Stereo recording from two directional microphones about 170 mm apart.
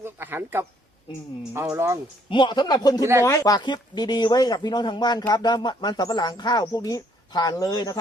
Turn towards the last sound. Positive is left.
turn(degrees=20)  # may be behind; listen again after turning